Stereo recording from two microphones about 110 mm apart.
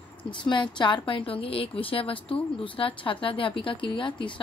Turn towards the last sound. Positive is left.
turn(degrees=45)  # may be behind; listen again after turning